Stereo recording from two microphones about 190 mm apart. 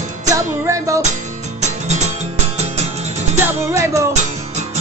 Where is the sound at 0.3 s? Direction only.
15° right (ahead or behind).